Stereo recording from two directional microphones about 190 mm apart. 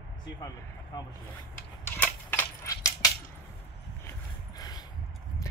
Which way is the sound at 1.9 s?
10° left (ahead or behind).